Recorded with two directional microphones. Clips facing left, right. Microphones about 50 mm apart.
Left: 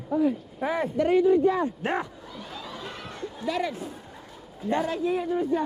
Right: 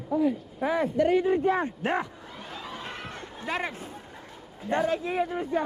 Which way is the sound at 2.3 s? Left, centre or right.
Right.